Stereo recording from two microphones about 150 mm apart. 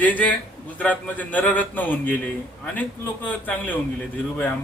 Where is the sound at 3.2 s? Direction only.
10° left (ahead or behind).